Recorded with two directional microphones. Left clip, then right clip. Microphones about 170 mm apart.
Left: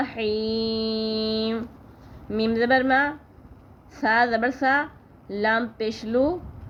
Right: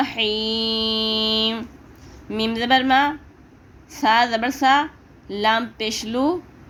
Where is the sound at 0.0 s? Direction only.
20° right (ahead or behind).